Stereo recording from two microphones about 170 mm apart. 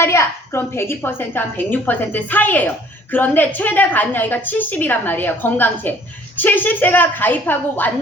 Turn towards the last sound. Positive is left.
turn(degrees=10)  # may be behind; listen again after turning